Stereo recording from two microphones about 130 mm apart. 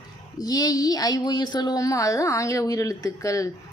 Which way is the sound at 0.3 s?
30° left (ahead or behind).